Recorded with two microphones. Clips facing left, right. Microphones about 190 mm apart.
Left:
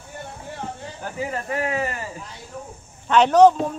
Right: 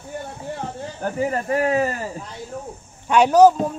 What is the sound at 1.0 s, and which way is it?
Speech, 45° right (ahead or behind).